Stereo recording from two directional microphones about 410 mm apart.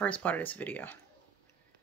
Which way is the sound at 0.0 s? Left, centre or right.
Centre.